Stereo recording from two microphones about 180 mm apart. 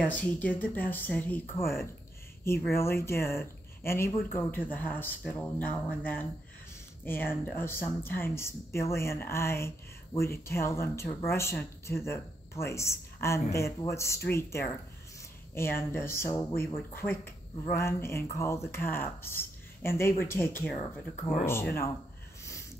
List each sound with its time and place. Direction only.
0.0 s speech: 10° left (ahead or behind)